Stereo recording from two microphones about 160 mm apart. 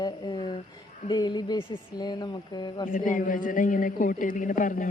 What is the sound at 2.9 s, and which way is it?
A woman's voice, 55° left (ahead or behind).